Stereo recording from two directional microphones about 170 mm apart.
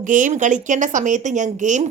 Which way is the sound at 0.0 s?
50° right (ahead or behind).